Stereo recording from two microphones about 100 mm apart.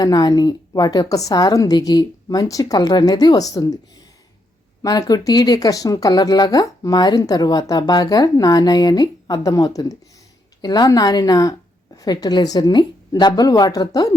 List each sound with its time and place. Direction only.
0.0 s speech: 40° left (ahead or behind)
4.8 s a woman's voice: 35° left (ahead or behind)